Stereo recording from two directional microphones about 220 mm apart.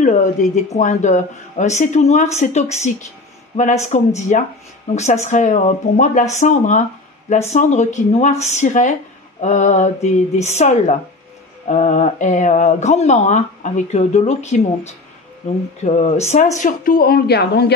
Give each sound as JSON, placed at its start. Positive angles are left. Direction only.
{"t": 0.0, "sound": "a woman's voice", "side_deg": 35}